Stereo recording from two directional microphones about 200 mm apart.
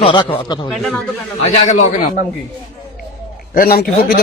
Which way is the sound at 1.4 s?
35° left (ahead or behind).